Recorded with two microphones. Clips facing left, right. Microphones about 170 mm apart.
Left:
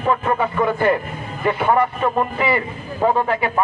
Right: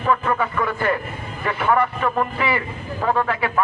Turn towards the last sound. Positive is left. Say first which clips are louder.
# left 2 dB
turn(degrees=25)  # may be behind; listen again after turning